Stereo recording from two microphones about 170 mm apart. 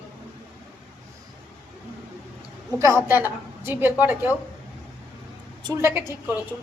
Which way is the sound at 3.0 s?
10° right (ahead or behind).